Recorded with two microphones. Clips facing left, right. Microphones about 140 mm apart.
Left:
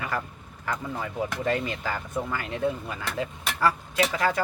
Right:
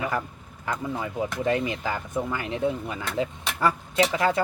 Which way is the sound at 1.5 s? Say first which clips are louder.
Right 3 dB; 20° right (ahead or behind).